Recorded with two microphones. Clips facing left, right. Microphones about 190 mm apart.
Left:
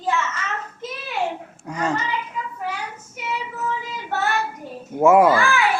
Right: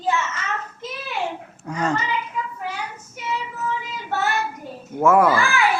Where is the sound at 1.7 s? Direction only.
Centre (ahead or behind).